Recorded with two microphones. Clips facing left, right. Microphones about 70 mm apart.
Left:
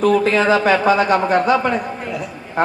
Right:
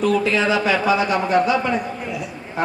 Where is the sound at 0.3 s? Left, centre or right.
Left.